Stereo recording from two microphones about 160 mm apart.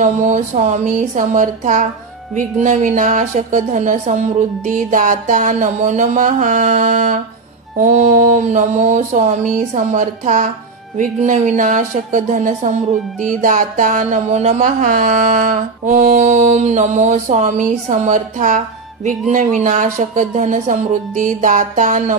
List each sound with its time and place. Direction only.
0.0 s speech: 50° right (ahead or behind)